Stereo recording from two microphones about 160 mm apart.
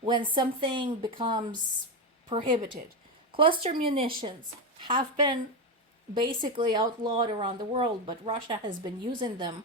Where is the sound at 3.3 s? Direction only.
35° right (ahead or behind).